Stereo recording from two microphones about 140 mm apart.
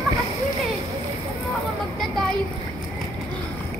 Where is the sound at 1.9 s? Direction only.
Centre (ahead or behind).